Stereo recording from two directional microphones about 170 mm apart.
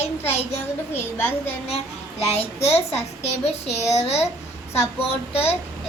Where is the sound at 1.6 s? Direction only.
35° left (ahead or behind).